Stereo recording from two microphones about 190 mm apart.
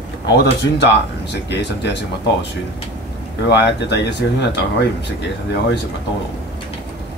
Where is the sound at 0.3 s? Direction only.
60° left (ahead or behind).